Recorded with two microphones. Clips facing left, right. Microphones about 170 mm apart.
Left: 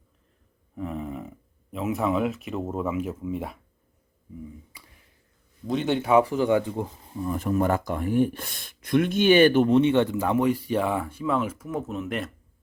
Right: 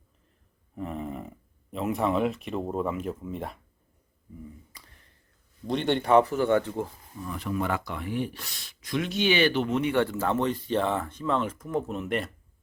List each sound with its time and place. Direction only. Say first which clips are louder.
0.8 s a sound: left 2 dB; centre (ahead or behind)
1.7 s speech: left 1 dB; centre (ahead or behind)
4.7 s a sound: left 1 dB; 10° left (ahead or behind)
5.6 s speech: left 1 dB; 5° left (ahead or behind)
7.3 s speech: left 5 dB; 45° left (ahead or behind)
9.6 s speech: left 6 dB; 25° left (ahead or behind); by 12.3 s centre (ahead or behind)